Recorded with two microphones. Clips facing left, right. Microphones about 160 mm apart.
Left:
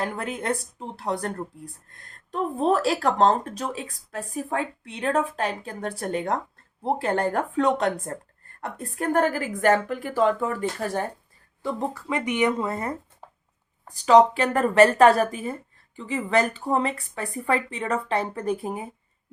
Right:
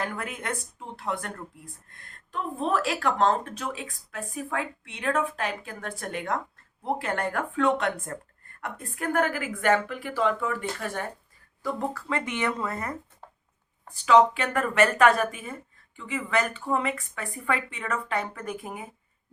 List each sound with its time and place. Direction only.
0.0 s speech: 30° left (ahead or behind)
11.6 s speech: 20° left (ahead or behind)
13.8 s speech: 40° left (ahead or behind)